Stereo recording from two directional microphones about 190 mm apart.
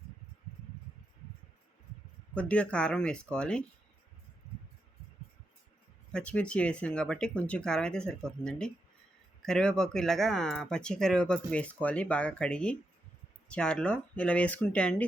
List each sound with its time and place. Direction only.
2.3 s speech: 5° left (ahead or behind)
6.1 s speech: 5° left (ahead or behind)